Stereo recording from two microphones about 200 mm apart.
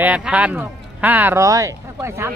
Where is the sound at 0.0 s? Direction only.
5° right (ahead or behind).